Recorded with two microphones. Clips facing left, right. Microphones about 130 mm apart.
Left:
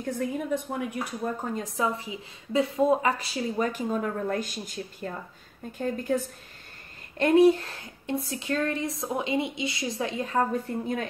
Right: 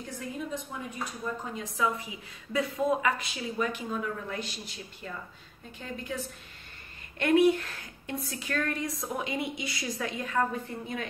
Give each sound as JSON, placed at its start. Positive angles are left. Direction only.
{"t": 0.0, "sound": "a woman's voice", "side_deg": 60}
{"t": 1.2, "sound": "a woman's voice", "side_deg": 50}
{"t": 7.2, "sound": "a woman's voice", "side_deg": 35}